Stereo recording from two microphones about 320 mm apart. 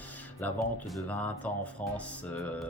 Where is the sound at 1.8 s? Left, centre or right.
Left.